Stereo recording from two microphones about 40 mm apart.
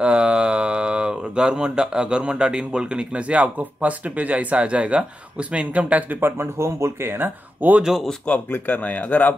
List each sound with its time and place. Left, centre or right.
0.0 s speech: right
6.2 s speech: right
7.8 s speech: centre
8.5 s speech: left